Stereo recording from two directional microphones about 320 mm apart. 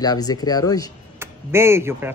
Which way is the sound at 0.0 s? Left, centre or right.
Centre.